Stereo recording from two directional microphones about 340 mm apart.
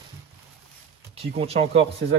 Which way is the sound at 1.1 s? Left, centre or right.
Centre.